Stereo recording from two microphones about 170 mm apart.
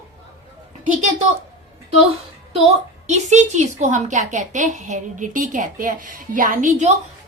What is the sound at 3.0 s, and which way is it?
A woman's voice, 45° right (ahead or behind).